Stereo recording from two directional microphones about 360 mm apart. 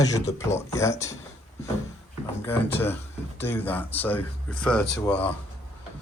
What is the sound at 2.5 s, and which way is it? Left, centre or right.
Speech, centre.